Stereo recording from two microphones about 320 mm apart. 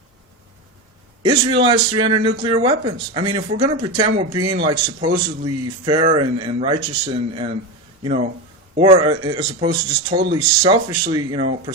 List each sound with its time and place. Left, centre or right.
1.2 s speech: centre